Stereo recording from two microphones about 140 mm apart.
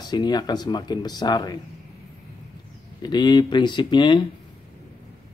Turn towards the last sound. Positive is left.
turn(degrees=35)  # may be behind; listen again after turning